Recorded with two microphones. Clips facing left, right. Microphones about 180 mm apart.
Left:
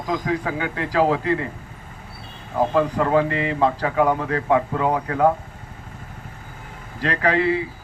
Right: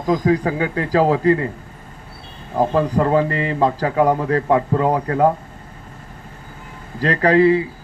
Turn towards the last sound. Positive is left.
turn(degrees=-40)  # may be behind; listen again after turning